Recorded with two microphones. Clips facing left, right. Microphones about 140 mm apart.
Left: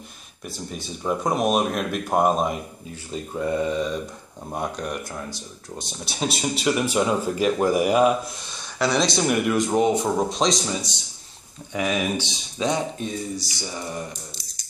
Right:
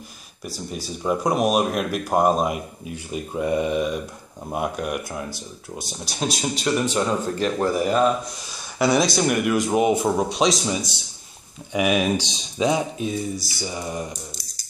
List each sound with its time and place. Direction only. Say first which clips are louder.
0.5 s speech: right 2 dB; 5° right (ahead or behind); by 8.1 s 10° left (ahead or behind)
8.7 s speech: right 2 dB; 10° right (ahead or behind)
12.6 s speech: right 3 dB; 5° right (ahead or behind)